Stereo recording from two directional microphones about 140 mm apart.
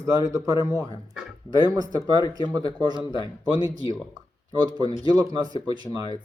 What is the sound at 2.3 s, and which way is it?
Speech, 25° right (ahead or behind).